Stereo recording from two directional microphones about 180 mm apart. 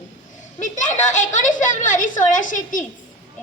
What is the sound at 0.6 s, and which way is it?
A woman's voice, 45° left (ahead or behind).